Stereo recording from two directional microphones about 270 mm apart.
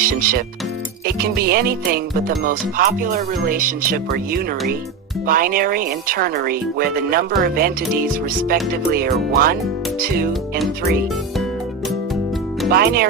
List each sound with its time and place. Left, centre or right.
0.0 s speech: right
12.7 s speech: right